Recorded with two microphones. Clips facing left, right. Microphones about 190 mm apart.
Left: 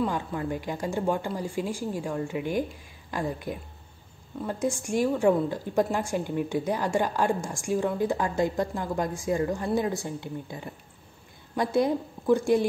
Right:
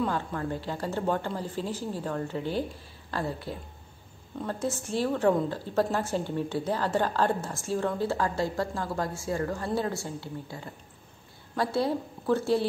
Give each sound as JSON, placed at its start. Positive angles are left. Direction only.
{"t": 0.0, "sound": "a woman's voice", "side_deg": 10}